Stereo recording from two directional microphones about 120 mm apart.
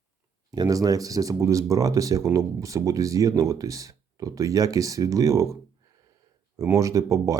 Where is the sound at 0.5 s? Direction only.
30° right (ahead or behind).